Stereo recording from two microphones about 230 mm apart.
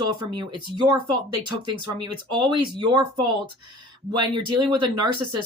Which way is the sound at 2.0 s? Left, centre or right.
Centre.